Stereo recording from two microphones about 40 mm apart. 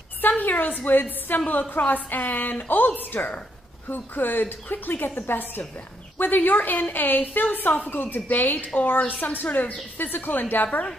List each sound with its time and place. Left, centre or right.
0.4 s a woman's voice: left